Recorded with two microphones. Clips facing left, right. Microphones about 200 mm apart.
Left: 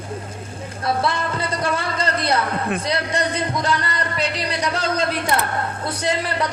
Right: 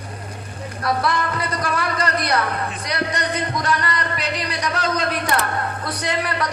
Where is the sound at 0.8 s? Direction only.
25° left (ahead or behind).